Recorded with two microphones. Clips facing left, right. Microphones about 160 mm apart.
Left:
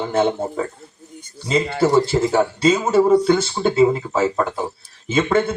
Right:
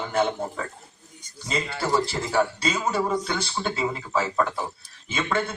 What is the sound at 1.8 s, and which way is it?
A man's voice, 25° left (ahead or behind).